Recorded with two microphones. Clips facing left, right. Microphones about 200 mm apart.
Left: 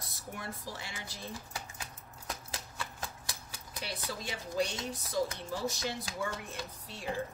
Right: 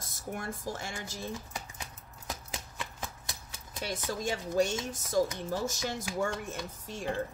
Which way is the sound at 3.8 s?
45° right (ahead or behind).